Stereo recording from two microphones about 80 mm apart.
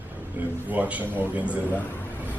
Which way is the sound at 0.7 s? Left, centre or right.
Centre.